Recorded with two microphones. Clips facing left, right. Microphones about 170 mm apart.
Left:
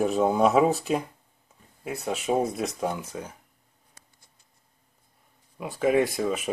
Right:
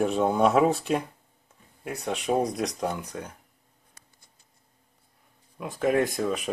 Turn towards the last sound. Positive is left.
turn(degrees=5)  # may be behind; listen again after turning